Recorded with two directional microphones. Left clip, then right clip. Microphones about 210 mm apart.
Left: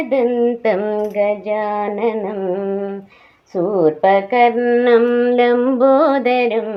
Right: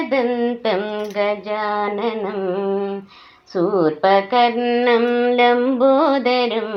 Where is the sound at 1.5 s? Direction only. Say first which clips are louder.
Left 1 dB; 15° left (ahead or behind).